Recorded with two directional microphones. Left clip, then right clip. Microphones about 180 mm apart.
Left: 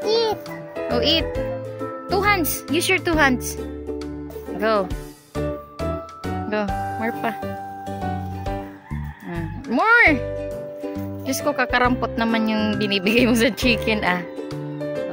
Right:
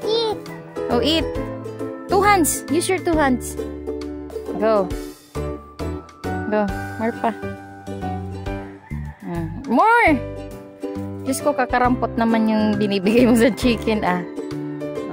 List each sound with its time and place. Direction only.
0.1 s music: 25° right (ahead or behind)
0.8 s speech: 40° right (ahead or behind)
2.0 s music: 40° right (ahead or behind)
2.7 s speech: 25° right (ahead or behind)
4.6 s speech: 15° right (ahead or behind)
4.8 s music: centre (ahead or behind)
6.5 s speech: 20° right (ahead or behind)
9.3 s music: 15° right (ahead or behind)
11.2 s speech: 15° right (ahead or behind)